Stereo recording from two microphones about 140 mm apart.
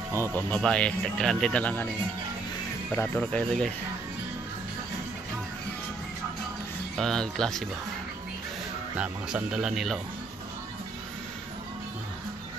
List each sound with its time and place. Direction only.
0.1 s speech: 20° right (ahead or behind)
0.6 s speech: 5° left (ahead or behind)
2.9 s speech: 10° left (ahead or behind)
7.0 s speech: 5° left (ahead or behind)
8.9 s speech: 5° right (ahead or behind)